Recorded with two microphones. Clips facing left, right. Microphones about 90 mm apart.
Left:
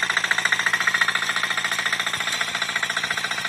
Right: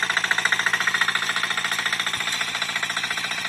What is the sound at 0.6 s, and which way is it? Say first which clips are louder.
Jackhammer: left 1 dB; 5° left (ahead or behind).